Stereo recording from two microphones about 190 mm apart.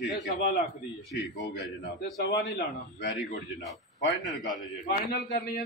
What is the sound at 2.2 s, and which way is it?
Speech, 60° left (ahead or behind).